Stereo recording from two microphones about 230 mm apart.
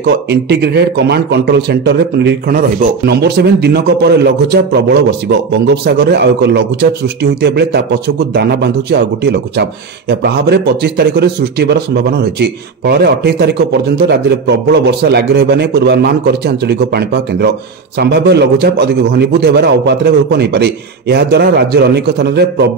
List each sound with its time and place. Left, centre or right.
0.0 s a man's voice: right